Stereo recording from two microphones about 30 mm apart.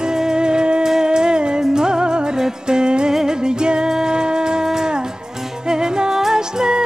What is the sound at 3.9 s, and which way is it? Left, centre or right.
Wind instrument, right.